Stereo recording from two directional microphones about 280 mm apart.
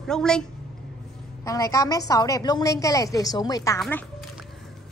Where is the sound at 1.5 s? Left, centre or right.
Centre.